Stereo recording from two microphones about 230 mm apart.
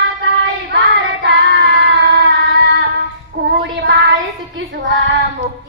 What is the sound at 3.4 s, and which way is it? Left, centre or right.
Child singing, right.